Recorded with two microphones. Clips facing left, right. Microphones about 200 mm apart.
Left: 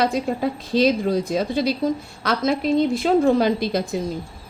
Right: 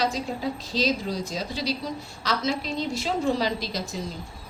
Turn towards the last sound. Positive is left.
turn(degrees=55)  # may be behind; listen again after turning